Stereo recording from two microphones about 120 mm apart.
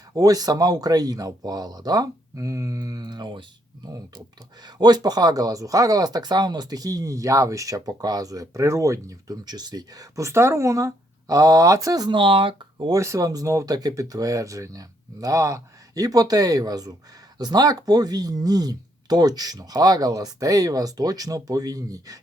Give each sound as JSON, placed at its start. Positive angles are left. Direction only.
{"t": 0.1, "sound": "speech", "side_deg": -30}
{"t": 12.9, "sound": "speech", "side_deg": -25}